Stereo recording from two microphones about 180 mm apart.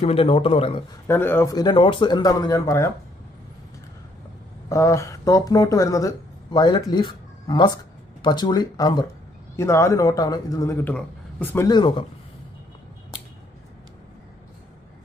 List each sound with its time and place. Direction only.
0.0 s speech: 35° left (ahead or behind)
1.0 s speech: 10° left (ahead or behind)
4.6 s a man's voice: 15° left (ahead or behind)
11.6 s speech: 25° left (ahead or behind)